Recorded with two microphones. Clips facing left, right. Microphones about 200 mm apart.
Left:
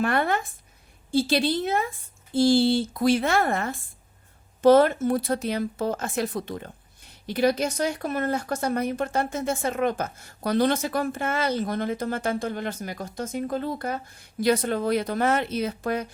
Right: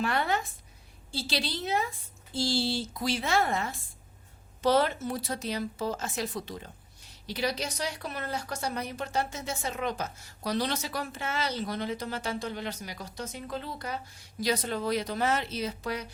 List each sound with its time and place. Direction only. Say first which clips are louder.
0.0 s a woman's voice: left 5 dB; 55° left (ahead or behind)